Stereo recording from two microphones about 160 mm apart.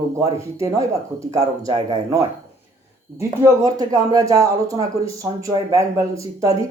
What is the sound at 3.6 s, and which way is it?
Speech, 20° right (ahead or behind).